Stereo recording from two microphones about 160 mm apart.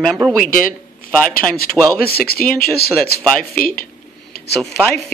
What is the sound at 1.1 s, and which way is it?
Speech, 5° left (ahead or behind).